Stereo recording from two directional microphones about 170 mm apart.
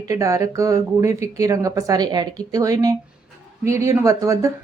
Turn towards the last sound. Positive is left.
turn(degrees=-20)  # may be behind; listen again after turning